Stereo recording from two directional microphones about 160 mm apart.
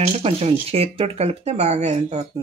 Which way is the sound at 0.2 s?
35° right (ahead or behind).